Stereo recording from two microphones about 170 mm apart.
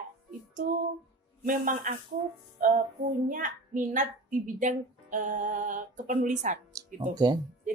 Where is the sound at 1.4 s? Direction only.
50° right (ahead or behind).